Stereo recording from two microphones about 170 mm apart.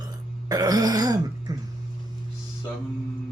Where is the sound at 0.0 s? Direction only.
20° right (ahead or behind).